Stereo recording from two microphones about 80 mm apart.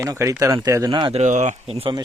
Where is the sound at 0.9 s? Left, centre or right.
Right.